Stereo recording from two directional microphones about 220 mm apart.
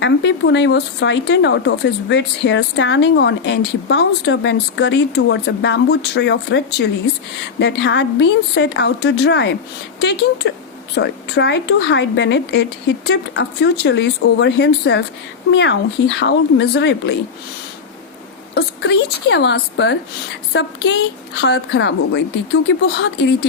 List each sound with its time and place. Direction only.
0.0 s speech: 55° left (ahead or behind)
7.6 s speech: 50° left (ahead or behind)
18.5 s speech: 50° left (ahead or behind)